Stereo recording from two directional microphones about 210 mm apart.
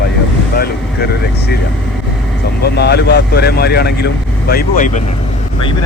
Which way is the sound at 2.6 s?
50° left (ahead or behind).